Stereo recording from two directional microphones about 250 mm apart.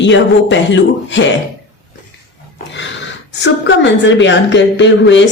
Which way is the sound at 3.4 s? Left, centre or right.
Left.